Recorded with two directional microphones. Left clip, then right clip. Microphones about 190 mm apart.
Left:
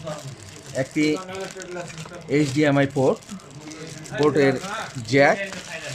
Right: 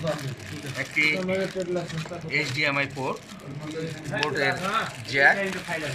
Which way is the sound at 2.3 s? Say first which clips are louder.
Left 5 dB; 35° left (ahead or behind).